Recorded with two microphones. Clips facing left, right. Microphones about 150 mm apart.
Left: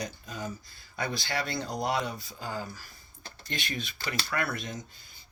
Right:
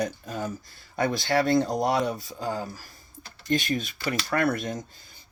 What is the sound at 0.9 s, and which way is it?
Speech, 45° right (ahead or behind).